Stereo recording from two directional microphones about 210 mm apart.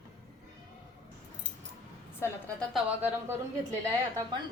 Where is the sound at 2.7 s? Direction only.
5° right (ahead or behind).